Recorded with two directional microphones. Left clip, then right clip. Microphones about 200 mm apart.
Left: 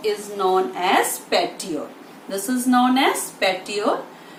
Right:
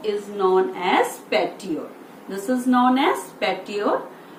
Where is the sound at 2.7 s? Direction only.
20° left (ahead or behind).